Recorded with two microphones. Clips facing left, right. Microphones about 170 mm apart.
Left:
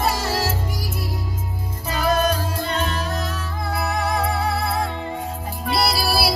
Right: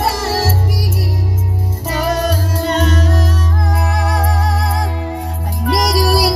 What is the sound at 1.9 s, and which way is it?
Music, 80° right.